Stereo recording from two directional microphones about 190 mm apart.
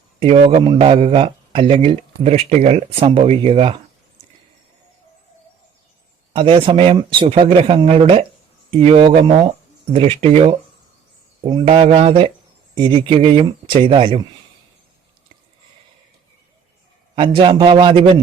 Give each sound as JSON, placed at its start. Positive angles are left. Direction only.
{"t": 0.2, "sound": "a man's voice", "side_deg": -30}
{"t": 6.3, "sound": "a man's voice", "side_deg": -25}
{"t": 17.2, "sound": "a man's voice", "side_deg": -25}